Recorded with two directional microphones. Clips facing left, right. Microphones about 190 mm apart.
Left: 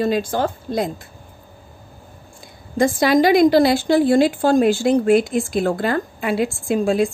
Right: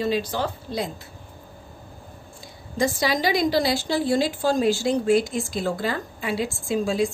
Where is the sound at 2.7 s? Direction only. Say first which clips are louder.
Left 8 dB; 55° left (ahead or behind).